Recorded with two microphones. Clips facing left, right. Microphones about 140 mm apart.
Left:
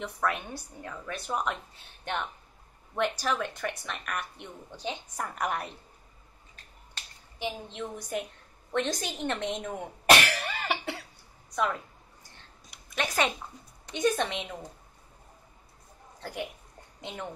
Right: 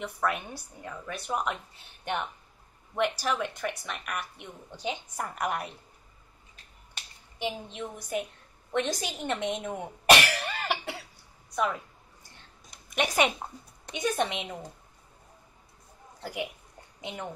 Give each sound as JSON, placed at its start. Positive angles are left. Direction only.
{"t": 0.0, "sound": "a woman's voice", "side_deg": -5}
{"t": 3.0, "sound": "a woman's voice", "side_deg": -5}
{"t": 7.4, "sound": "a woman's voice", "side_deg": -10}
{"t": 10.0, "sound": "cough", "side_deg": 0}
{"t": 11.5, "sound": "a woman's voice", "side_deg": -5}
{"t": 12.9, "sound": "a woman's voice", "side_deg": -15}
{"t": 16.2, "sound": "a woman's voice", "side_deg": -10}